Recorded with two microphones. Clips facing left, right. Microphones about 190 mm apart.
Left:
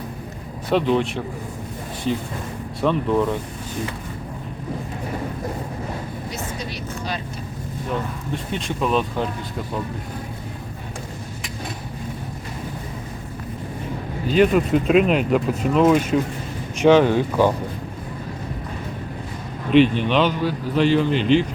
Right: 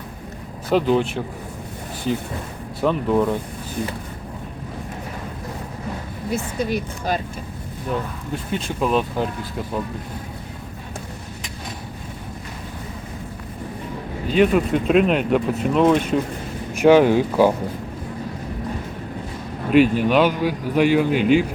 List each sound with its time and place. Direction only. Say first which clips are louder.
0.7 s speech: right 1 dB; centre (ahead or behind)
2.8 s speech: right 1 dB; 5° right (ahead or behind)
6.3 s speech: right 12 dB; 55° right (ahead or behind)
8.3 s speech: right 1 dB; 5° right (ahead or behind)
14.3 s speech: even; centre (ahead or behind)
16.7 s a man's voice: right 1 dB; 10° right (ahead or behind)
19.7 s a man's voice: right 1 dB; 5° right (ahead or behind)